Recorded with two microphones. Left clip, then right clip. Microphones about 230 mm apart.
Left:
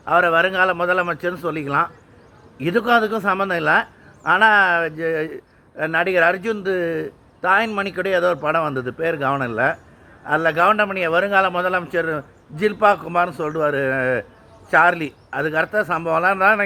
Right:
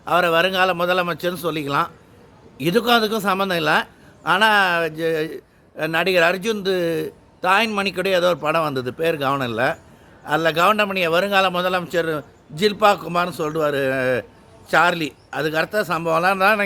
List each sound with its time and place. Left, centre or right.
0.0 s speech: centre
7.4 s speech: centre
8.2 s speech: centre